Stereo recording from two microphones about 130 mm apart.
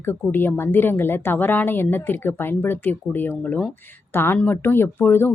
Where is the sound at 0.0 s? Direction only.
15° left (ahead or behind).